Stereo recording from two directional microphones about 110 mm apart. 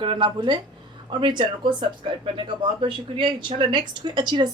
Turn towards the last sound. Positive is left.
turn(degrees=-45)  # may be behind; listen again after turning